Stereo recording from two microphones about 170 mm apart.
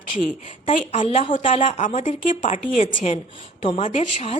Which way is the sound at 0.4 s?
40° left (ahead or behind).